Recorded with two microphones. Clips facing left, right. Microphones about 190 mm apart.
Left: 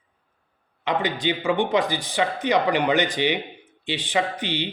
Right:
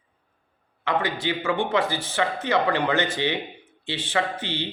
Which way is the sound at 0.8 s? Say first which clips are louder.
Left 1 dB; 20° left (ahead or behind).